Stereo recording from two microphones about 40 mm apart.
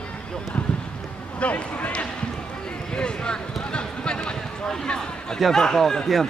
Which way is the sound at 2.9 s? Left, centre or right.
Left.